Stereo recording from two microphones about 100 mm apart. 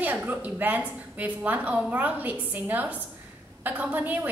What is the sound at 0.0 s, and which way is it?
A woman's voice, 15° right (ahead or behind).